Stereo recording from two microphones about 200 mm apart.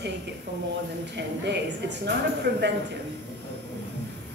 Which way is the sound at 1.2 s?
60° right (ahead or behind).